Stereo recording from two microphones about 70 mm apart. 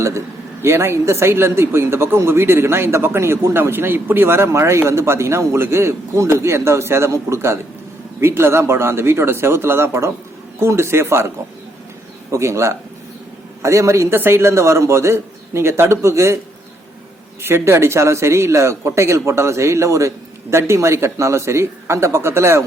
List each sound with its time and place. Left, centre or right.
0.6 s speech: right
12.3 s a man's voice: right
17.4 s speech: right